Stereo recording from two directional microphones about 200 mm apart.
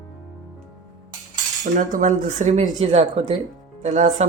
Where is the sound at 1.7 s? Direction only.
40° right (ahead or behind).